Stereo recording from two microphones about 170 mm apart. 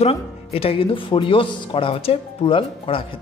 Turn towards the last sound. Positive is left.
turn(degrees=30)  # may be behind; listen again after turning